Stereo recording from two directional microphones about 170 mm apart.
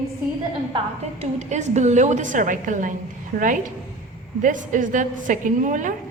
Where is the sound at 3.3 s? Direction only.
65° right (ahead or behind).